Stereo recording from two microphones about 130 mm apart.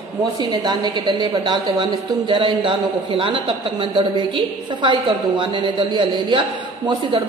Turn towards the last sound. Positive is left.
turn(degrees=-40)  # may be behind; listen again after turning